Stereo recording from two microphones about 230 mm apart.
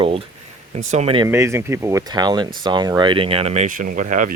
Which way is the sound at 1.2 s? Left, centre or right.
Centre.